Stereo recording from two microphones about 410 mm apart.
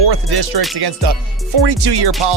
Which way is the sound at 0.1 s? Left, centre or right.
Right.